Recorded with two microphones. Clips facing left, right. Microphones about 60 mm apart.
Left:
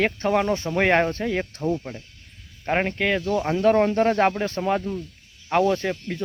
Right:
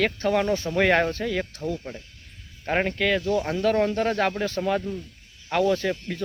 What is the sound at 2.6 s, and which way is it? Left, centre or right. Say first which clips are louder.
Speech: left 1 dB; centre.